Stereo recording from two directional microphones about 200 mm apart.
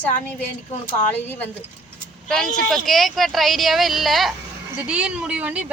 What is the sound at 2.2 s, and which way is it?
Speech, 5° left (ahead or behind).